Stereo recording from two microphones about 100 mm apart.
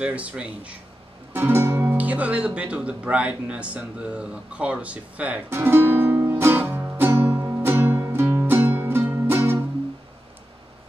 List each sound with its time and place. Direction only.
0.0 s speech: 15° right (ahead or behind)
1.3 s guitar: 25° right (ahead or behind)